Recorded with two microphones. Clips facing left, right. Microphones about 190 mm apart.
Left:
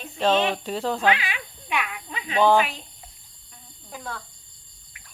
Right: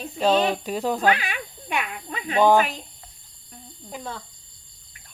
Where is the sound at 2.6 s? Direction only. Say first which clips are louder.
Right 1 dB; 45° right (ahead or behind).